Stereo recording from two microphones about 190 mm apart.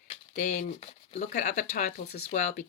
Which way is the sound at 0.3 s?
40° left (ahead or behind).